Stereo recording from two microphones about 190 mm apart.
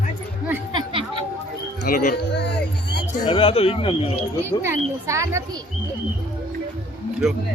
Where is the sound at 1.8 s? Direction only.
55° left (ahead or behind).